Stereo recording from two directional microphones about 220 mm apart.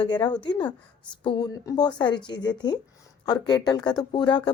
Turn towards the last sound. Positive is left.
turn(degrees=20)  # may be behind; listen again after turning